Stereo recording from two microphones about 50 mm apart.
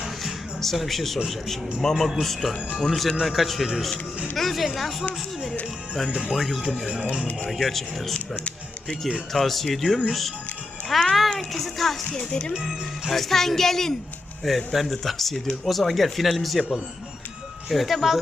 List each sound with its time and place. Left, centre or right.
0.0 s music: centre
1.8 s speech: centre
6.3 s speech: centre
6.8 s speech: centre
7.6 s speech: centre
9.3 s a child's voice: centre
12.6 s speech: centre
17.7 s speech: centre